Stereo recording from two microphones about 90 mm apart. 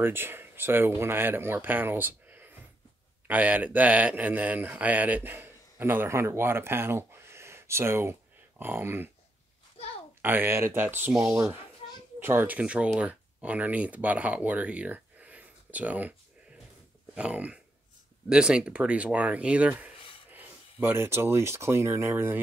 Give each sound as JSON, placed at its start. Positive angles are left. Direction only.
{"t": 0.0, "sound": "speech", "side_deg": -25}
{"t": 10.2, "sound": "speech", "side_deg": -20}
{"t": 11.3, "sound": "a child's voice", "side_deg": -35}
{"t": 12.2, "sound": "speech", "side_deg": -25}